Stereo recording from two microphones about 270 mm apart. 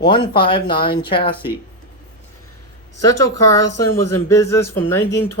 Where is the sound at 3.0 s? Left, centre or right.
Centre.